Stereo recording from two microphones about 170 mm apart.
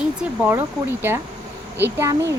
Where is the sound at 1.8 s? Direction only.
15° right (ahead or behind).